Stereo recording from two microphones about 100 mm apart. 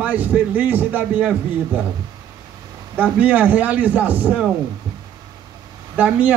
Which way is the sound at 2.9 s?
15° right (ahead or behind).